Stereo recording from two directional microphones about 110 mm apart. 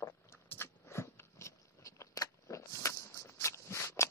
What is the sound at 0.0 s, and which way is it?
Biting, 25° left (ahead or behind).